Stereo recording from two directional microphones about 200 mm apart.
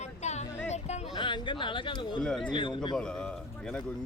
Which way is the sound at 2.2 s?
5° left (ahead or behind).